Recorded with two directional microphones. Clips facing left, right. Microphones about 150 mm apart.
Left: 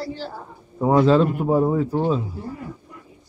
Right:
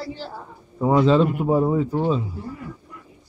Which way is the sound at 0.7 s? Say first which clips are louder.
Left 1 dB; 5° left (ahead or behind).